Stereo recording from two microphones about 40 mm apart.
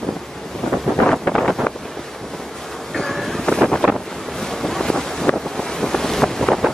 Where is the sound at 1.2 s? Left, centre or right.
Centre.